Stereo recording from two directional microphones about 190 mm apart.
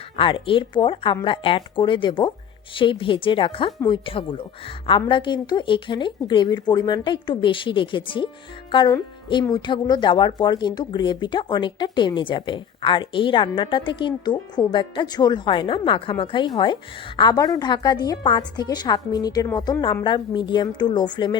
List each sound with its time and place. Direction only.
0.2 s speech: 25° left (ahead or behind)